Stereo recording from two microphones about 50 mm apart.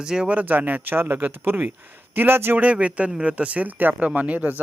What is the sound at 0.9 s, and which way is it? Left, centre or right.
Speech, right.